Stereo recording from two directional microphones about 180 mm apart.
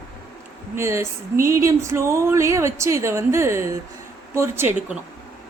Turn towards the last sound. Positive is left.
turn(degrees=-15)  # may be behind; listen again after turning